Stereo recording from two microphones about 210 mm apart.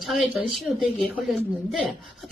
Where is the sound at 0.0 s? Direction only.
Centre (ahead or behind).